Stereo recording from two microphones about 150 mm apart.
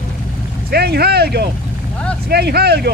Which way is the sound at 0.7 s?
90° right.